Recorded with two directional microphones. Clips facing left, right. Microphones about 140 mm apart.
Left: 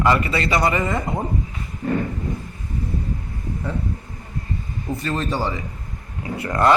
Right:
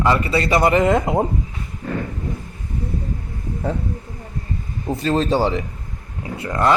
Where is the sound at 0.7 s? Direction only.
70° right (ahead or behind).